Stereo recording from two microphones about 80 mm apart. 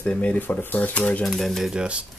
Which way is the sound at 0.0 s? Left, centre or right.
Centre.